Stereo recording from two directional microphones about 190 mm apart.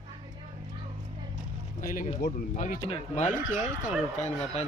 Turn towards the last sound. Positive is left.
turn(degrees=35)  # may be behind; listen again after turning